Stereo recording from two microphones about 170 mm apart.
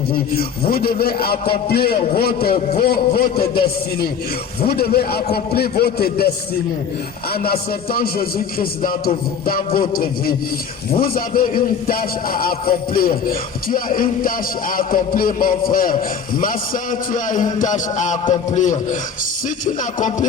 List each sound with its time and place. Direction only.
0.1 s speech: 60° left (ahead or behind)
19.5 s music: 50° left (ahead or behind)